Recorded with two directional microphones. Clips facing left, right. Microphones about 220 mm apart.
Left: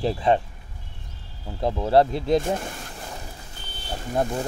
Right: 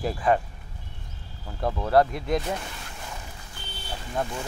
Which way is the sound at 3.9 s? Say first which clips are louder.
Left 5 dB; 40° left (ahead or behind).